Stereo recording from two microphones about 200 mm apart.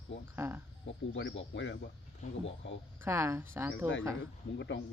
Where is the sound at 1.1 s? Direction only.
70° left (ahead or behind).